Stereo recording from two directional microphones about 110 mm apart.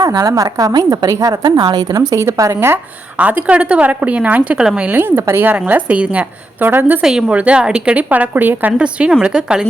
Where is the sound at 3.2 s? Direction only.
10° right (ahead or behind).